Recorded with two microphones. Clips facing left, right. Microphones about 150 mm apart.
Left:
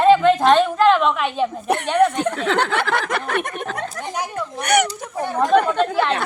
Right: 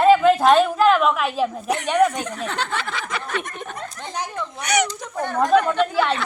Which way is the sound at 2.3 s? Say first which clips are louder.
Left 7 dB; 80° left.